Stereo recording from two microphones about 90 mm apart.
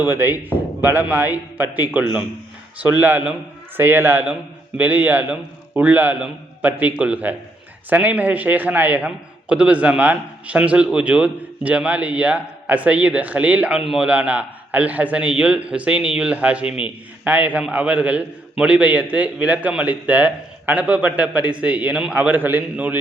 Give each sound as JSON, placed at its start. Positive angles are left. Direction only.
{"t": 0.0, "sound": "a man's voice", "side_deg": -25}